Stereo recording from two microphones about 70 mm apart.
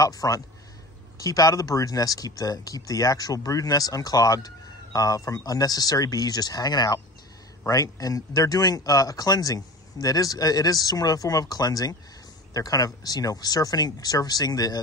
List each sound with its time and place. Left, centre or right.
0.0 s speech: left
7.6 s speech: left